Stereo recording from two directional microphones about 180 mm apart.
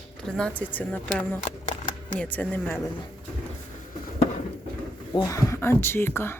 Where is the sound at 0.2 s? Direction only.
5° left (ahead or behind).